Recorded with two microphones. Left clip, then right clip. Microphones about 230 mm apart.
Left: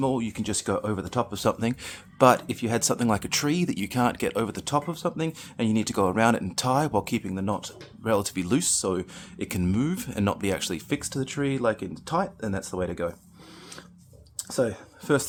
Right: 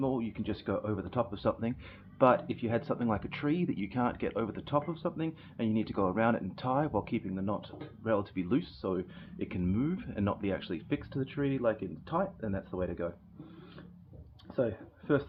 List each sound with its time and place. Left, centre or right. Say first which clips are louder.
0.0 s speech: left 7 dB; left
14.5 s speech: left 6 dB; left